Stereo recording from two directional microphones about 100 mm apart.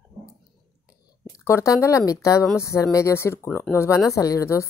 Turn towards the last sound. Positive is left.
turn(degrees=30)  # may be behind; listen again after turning